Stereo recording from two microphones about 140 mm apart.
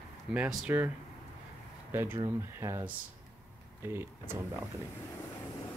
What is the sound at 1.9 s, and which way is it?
Speech, 15° right (ahead or behind).